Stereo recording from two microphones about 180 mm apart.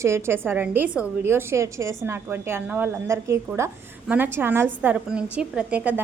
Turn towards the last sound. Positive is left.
turn(degrees=-10)  # may be behind; listen again after turning